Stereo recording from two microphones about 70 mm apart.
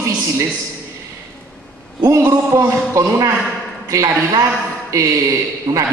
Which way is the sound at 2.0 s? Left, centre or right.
Right.